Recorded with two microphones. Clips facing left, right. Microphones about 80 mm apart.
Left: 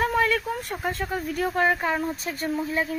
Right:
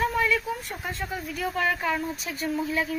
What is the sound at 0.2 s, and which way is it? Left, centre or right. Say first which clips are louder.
Speech: left 2 dB; left.